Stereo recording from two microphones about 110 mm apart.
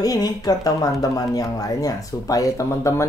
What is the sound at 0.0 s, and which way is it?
Speech, 35° left (ahead or behind).